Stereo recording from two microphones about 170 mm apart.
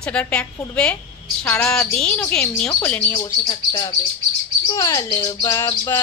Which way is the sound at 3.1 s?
25° left (ahead or behind).